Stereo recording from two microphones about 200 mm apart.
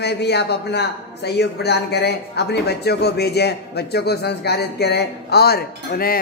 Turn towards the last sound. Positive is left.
turn(degrees=50)  # may be behind; listen again after turning